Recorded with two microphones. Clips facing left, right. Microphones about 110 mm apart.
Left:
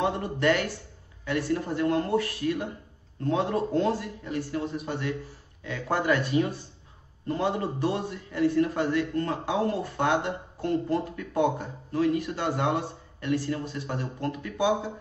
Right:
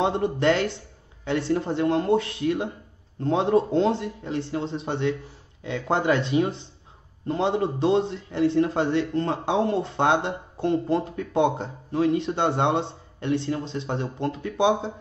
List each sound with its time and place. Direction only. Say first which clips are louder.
0.0 s a man's voice: right 4 dB; 25° right (ahead or behind)